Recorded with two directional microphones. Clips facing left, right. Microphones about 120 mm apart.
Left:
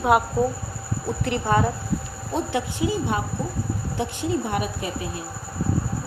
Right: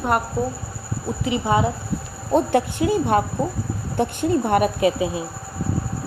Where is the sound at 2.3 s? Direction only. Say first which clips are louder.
Right 7 dB; 55° right (ahead or behind).